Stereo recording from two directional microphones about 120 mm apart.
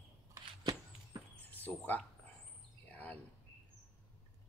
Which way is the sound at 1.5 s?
15° left (ahead or behind).